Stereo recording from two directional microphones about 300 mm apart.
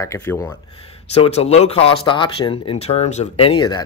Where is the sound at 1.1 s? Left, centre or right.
Left.